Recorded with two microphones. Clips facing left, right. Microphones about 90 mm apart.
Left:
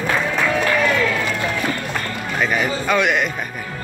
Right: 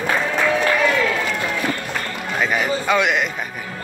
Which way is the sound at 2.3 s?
Centre (ahead or behind).